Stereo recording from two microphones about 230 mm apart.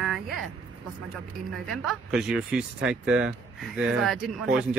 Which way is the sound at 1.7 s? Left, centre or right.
Centre.